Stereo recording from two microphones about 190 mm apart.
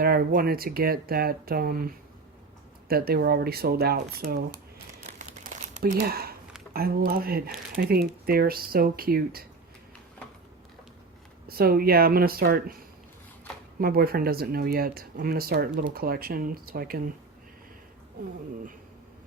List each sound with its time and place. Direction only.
0.0 s speech: 50° right (ahead or behind)
2.9 s speech: 55° right (ahead or behind)
5.0 s crumpling: 40° right (ahead or behind)
6.0 s speech: 55° right (ahead or behind)
11.4 s speech: 50° right (ahead or behind)
13.7 s speech: 50° right (ahead or behind)